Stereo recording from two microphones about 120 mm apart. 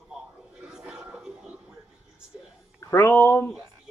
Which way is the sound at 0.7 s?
5° right (ahead or behind).